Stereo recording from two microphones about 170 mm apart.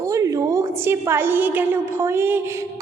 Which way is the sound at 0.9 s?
15° right (ahead or behind).